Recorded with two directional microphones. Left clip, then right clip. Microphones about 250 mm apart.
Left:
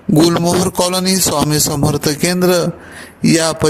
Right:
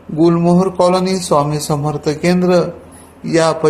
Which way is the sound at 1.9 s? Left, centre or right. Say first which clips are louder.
Left 1 dB; left.